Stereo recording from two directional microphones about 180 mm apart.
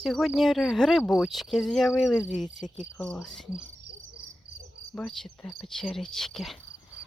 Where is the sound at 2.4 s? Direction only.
45° left (ahead or behind).